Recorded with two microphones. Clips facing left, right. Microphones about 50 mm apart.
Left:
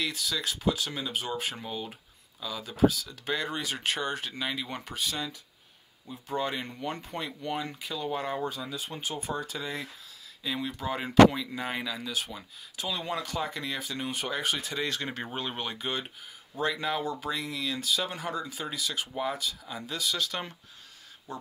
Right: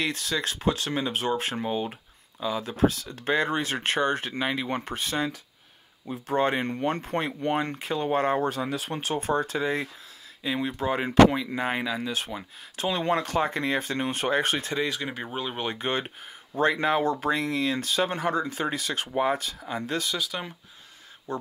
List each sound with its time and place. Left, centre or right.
0.0 s speech: right
1.6 s speech: right
2.6 s speech: right
6.0 s speech: right
9.6 s speech: right
12.7 s speech: right
14.8 s speech: centre
15.8 s speech: right
17.0 s speech: right
17.3 s speech: right
20.2 s speech: centre
21.3 s speech: right